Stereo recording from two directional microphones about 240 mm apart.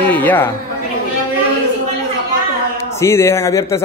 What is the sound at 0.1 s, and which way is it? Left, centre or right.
Speech, centre.